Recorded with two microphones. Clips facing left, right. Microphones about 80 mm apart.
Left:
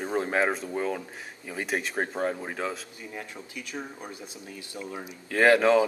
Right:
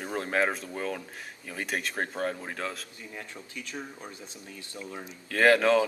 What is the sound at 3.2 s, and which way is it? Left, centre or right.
Speech, centre.